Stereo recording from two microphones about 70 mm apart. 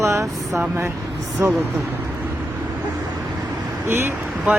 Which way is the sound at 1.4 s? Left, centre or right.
Right.